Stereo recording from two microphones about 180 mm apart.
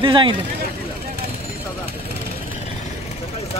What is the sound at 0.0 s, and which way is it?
Speech, 25° right (ahead or behind).